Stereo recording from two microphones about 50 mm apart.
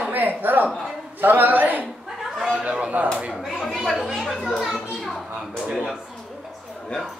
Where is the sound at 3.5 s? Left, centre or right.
Centre.